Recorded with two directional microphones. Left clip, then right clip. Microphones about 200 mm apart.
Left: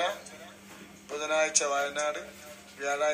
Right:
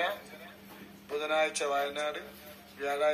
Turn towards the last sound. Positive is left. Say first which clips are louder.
# left 1 dB
turn(degrees=-5)  # may be behind; listen again after turning